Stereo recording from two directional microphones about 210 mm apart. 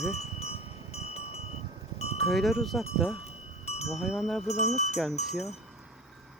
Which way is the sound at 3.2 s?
30° left (ahead or behind).